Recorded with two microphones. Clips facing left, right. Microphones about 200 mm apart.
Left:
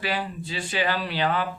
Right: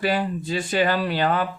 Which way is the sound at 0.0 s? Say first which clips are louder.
Right 6 dB; 45° right (ahead or behind).